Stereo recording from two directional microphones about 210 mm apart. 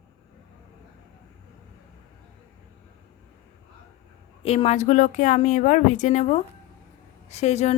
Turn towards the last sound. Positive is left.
turn(degrees=35)  # may be behind; listen again after turning